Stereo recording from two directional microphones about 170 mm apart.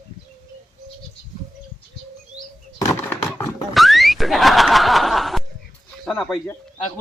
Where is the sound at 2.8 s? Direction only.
15° left (ahead or behind).